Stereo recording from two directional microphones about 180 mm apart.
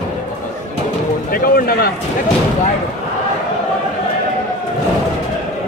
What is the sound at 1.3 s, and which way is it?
Speech, 55° left (ahead or behind).